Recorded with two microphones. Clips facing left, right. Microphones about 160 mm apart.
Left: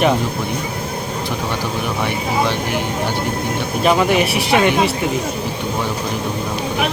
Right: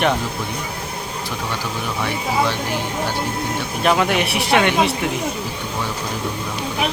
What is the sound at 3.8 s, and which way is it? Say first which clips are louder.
Speech: left 3 dB; centre (ahead or behind).